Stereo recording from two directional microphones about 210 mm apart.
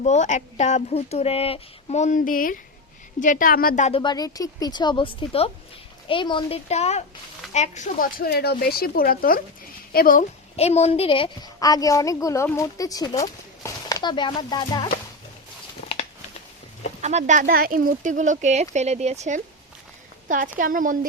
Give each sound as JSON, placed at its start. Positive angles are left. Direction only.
{"t": 0.0, "sound": "speech", "side_deg": 35}
{"t": 4.0, "sound": "a woman's voice", "side_deg": 20}
{"t": 17.0, "sound": "speech", "side_deg": -35}
{"t": 17.4, "sound": "speech", "side_deg": -45}